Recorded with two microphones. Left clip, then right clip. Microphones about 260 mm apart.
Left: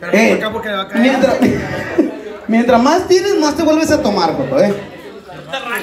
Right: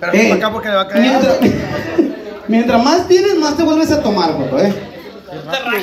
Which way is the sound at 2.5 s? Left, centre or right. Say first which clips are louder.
Left 1 dB; left.